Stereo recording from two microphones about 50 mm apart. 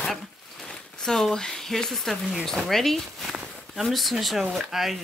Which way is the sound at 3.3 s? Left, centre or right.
Centre.